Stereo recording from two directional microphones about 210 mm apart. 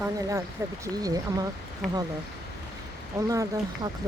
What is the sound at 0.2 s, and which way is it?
Speech, 15° right (ahead or behind).